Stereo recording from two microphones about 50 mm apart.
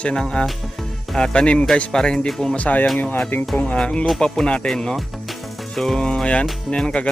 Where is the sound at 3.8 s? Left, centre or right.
Left.